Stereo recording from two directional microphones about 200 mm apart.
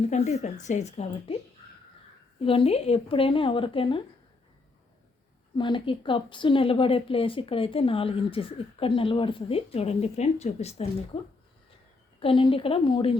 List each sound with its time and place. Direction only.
0.0 s a woman's voice: 35° left (ahead or behind)
2.4 s speech: 25° left (ahead or behind)
5.5 s speech: 25° left (ahead or behind)
12.2 s speech: 25° left (ahead or behind)